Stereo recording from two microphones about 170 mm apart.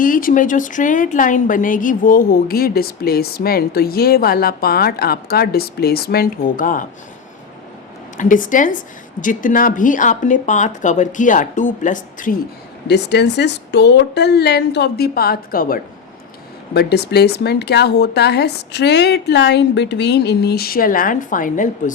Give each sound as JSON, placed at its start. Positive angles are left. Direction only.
{"t": 0.0, "sound": "a woman's voice", "side_deg": 55}
{"t": 8.2, "sound": "speech", "side_deg": 50}
{"t": 12.9, "sound": "a woman's voice", "side_deg": 80}
{"t": 16.7, "sound": "speech", "side_deg": 75}